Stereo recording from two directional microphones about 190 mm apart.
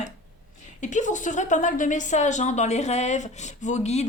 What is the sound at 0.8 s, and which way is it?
A woman's voice, 40° left (ahead or behind).